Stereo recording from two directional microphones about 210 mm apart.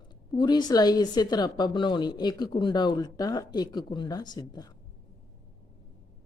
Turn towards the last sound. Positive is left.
turn(degrees=20)  # may be behind; listen again after turning